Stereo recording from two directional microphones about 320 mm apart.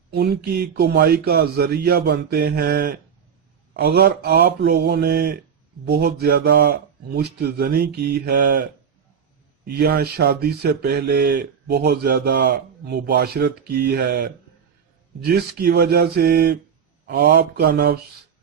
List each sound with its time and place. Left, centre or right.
0.1 s speech: right
9.6 s speech: right